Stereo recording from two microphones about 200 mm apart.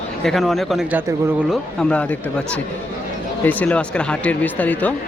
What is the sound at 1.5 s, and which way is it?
Speech, 5° left (ahead or behind).